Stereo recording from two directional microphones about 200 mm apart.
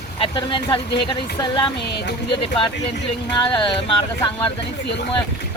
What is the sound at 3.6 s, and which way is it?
Speech, 25° left (ahead or behind).